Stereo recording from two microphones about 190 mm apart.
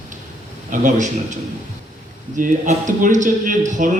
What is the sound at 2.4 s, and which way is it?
A man's voice, 45° right (ahead or behind).